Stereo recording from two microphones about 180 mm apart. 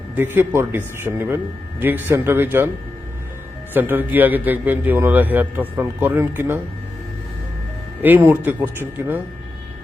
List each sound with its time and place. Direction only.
0.2 s a man's voice: 10° right (ahead or behind)
3.8 s a man's voice: 10° right (ahead or behind)
8.0 s a man's voice: 10° right (ahead or behind)